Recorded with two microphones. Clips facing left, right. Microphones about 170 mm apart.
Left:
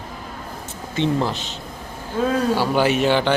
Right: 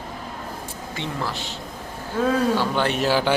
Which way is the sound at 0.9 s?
20° left (ahead or behind).